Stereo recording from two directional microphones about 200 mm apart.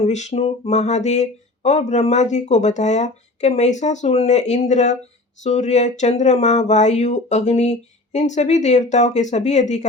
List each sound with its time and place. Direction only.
0.0 s speech: 35° left (ahead or behind)